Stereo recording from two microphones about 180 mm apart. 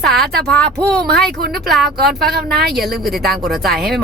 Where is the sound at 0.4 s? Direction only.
5° left (ahead or behind).